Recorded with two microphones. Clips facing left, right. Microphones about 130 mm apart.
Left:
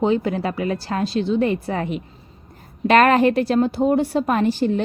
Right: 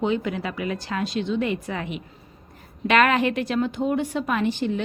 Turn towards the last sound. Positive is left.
turn(degrees=40)  # may be behind; listen again after turning